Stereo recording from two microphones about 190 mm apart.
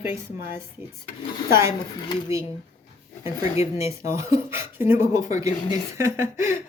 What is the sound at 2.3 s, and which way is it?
Speech, 15° right (ahead or behind).